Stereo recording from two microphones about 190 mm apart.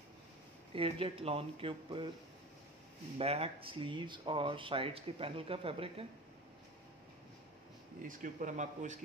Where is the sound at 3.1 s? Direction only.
30° right (ahead or behind).